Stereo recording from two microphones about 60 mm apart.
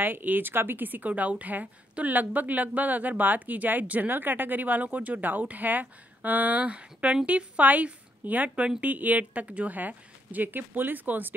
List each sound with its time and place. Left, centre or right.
0.0 s a woman's voice: right